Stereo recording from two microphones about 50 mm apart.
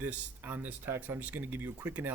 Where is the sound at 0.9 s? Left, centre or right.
Right.